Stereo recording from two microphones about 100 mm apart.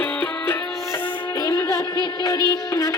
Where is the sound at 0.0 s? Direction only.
15° left (ahead or behind).